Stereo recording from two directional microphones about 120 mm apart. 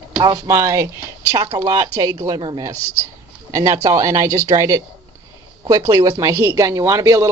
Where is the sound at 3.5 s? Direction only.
25° right (ahead or behind).